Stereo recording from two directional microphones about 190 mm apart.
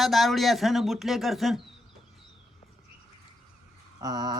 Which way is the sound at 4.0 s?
20° right (ahead or behind).